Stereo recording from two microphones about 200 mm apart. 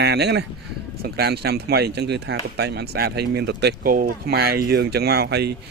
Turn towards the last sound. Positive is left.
turn(degrees=-55)  # may be behind; listen again after turning